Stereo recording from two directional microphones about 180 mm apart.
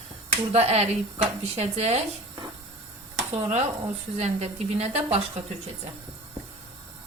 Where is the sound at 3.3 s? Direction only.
35° right (ahead or behind).